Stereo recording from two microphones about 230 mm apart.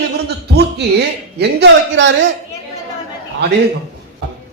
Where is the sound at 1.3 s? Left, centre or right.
Right.